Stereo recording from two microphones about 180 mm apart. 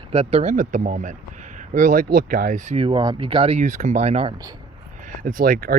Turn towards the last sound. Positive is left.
turn(degrees=-50)  # may be behind; listen again after turning